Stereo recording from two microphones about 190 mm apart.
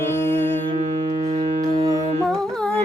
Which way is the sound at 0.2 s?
10° left (ahead or behind).